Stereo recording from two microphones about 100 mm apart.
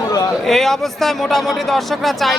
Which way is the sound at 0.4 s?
5° left (ahead or behind).